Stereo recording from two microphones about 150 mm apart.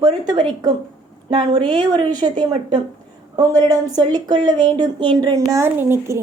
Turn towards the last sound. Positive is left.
turn(degrees=-15)  # may be behind; listen again after turning